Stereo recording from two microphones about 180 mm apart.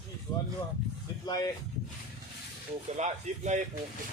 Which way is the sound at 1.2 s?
20° left (ahead or behind).